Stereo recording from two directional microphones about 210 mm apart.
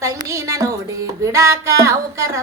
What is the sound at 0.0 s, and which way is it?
Music, 15° right (ahead or behind).